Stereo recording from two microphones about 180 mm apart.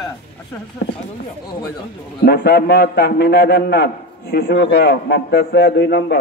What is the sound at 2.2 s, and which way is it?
A man's voice, 60° left (ahead or behind).